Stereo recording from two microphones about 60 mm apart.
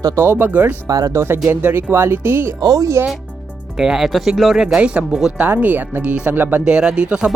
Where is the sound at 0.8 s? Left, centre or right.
Right.